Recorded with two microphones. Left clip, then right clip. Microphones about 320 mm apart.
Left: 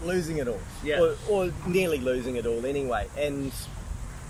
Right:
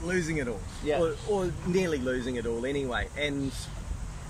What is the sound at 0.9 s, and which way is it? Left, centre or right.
Speech, centre.